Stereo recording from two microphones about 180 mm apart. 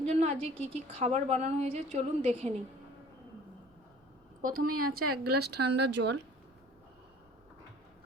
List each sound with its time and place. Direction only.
0.0 s a woman's voice: 35° right (ahead or behind)
4.4 s speech: 50° right (ahead or behind); by 6.2 s 70° right (ahead or behind)